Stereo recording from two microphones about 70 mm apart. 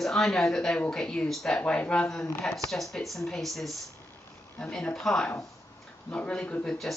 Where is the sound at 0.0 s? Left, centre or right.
Centre.